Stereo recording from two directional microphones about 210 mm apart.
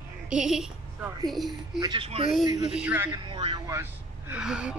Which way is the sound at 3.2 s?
20° right (ahead or behind).